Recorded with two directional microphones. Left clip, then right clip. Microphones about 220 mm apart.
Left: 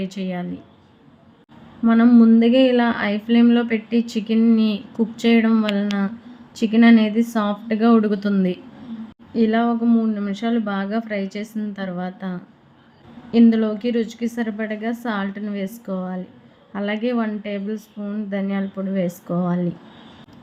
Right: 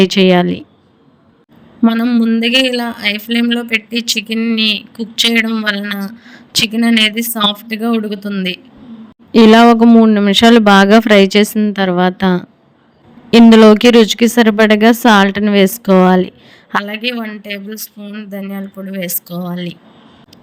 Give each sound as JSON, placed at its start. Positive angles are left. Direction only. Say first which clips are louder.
{"t": 0.0, "sound": "speech", "louder": "right 19 dB", "side_deg": -40}
{"t": 2.0, "sound": "speech", "louder": "right 1 dB", "side_deg": -40}
{"t": 2.6, "sound": "a woman's voice", "louder": "right 2 dB", "side_deg": 0}
{"t": 3.1, "sound": "speech", "louder": "right 7 dB", "side_deg": -45}
{"t": 3.3, "sound": "a woman's voice", "louder": "right 3 dB", "side_deg": 0}
{"t": 3.9, "sound": "speech", "louder": "right 5 dB", "side_deg": -45}
{"t": 5.7, "sound": "a woman's voice", "louder": "right 3 dB", "side_deg": 0}
{"t": 8.4, "sound": "speech", "louder": "right 4 dB", "side_deg": -45}
{"t": 18.3, "sound": "a woman's voice", "louder": "left 1 dB", "side_deg": 0}